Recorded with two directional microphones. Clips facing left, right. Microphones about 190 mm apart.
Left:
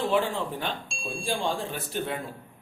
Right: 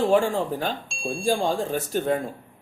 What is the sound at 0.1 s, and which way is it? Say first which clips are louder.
A man's voice: right 5 dB; 45° right (ahead or behind).